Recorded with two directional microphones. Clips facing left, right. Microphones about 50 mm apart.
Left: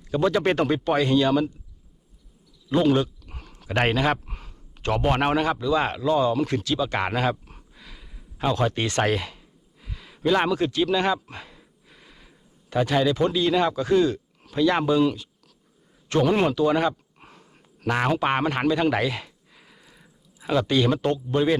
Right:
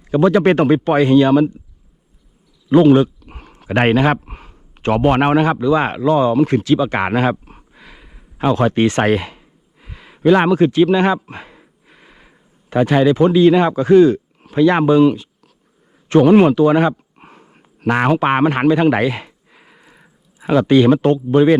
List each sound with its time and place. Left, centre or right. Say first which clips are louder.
0.0 s speech: right 9 dB; right
2.6 s speech: right 10 dB; right